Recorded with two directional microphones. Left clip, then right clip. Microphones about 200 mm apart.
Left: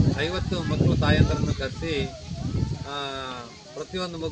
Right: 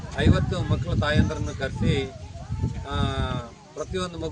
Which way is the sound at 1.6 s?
15° right (ahead or behind).